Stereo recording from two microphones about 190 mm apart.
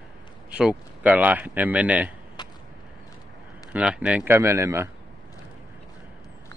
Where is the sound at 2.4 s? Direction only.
25° left (ahead or behind).